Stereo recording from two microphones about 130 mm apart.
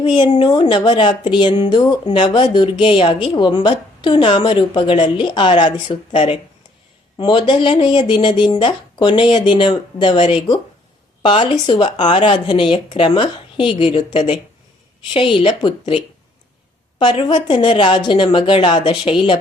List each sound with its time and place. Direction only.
0.1 s a woman's voice: 35° left (ahead or behind)
17.0 s a woman's voice: 35° left (ahead or behind)